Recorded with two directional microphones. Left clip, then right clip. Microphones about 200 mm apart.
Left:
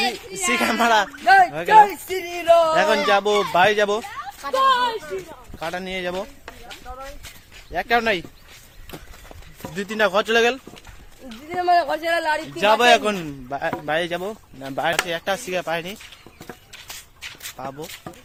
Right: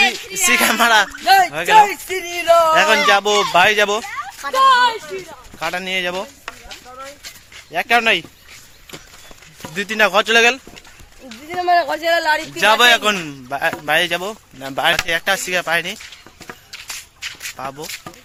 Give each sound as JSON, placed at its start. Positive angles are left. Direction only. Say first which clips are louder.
{"t": 0.0, "sound": "a sound", "louder": "right 7 dB", "side_deg": 0}
{"t": 1.2, "sound": "speech", "louder": "left 2 dB", "side_deg": -20}
{"t": 1.5, "sound": "speech", "louder": "right 2 dB", "side_deg": -10}
{"t": 2.0, "sound": "speech", "louder": "right 2 dB", "side_deg": 5}
{"t": 2.7, "sound": "speech", "louder": "right 5 dB", "side_deg": -5}
{"t": 4.5, "sound": "speech", "louder": "right 6 dB", "side_deg": -30}
{"t": 5.5, "sound": "speech", "louder": "right 7 dB", "side_deg": -15}
{"t": 7.7, "sound": "speech", "louder": "right 5 dB", "side_deg": -15}
{"t": 9.7, "sound": "speech", "louder": "right 5 dB", "side_deg": -15}
{"t": 11.4, "sound": "speech", "louder": "right 3 dB", "side_deg": -35}
{"t": 12.5, "sound": "speech", "louder": "right 2 dB", "side_deg": -5}
{"t": 17.2, "sound": "shuffle", "louder": "right 7 dB", "side_deg": 5}